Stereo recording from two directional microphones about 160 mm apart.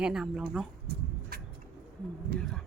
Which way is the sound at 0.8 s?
75° right (ahead or behind).